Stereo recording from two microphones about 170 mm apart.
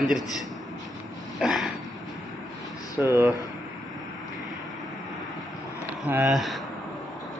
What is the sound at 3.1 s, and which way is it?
Speech, 10° right (ahead or behind).